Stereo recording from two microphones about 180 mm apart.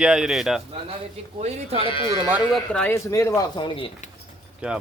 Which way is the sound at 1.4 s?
35° right (ahead or behind).